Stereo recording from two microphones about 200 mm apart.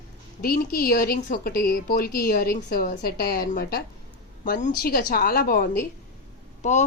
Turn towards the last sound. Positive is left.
turn(degrees=35)  # may be behind; listen again after turning